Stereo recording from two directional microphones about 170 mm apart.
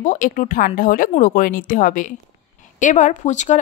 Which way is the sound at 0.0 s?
50° left (ahead or behind).